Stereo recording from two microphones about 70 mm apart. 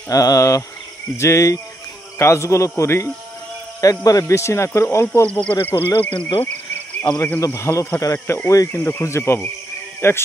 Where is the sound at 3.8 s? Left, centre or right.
Left.